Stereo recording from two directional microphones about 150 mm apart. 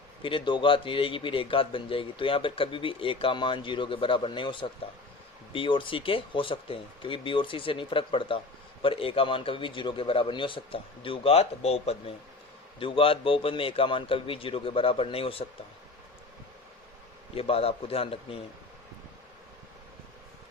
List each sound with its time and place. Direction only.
0.2 s speech: 35° left (ahead or behind)
17.3 s speech: 40° left (ahead or behind)